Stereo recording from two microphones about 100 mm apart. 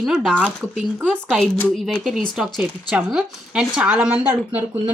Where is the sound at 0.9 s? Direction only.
15° right (ahead or behind).